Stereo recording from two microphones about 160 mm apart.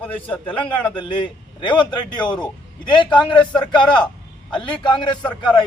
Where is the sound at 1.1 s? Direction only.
30° left (ahead or behind).